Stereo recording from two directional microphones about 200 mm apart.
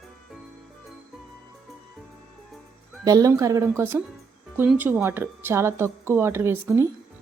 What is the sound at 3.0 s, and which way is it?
Speech, 15° right (ahead or behind).